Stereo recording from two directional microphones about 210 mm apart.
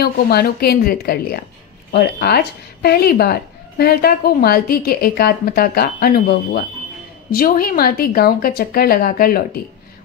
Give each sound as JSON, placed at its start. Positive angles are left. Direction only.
{"t": 0.0, "sound": "speech", "side_deg": 50}